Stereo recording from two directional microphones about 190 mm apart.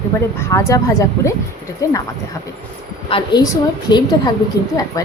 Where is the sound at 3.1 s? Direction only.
25° left (ahead or behind).